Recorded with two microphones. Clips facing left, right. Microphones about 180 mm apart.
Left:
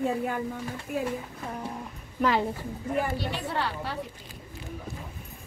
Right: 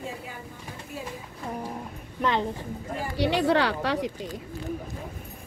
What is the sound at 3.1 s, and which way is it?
Speech, 75° right (ahead or behind).